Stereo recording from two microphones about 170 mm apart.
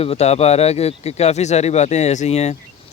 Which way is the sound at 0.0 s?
35° left (ahead or behind).